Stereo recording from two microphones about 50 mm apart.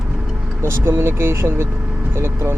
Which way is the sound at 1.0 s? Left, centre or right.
Right.